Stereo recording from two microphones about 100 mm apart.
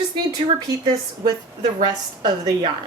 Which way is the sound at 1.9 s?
45° right (ahead or behind).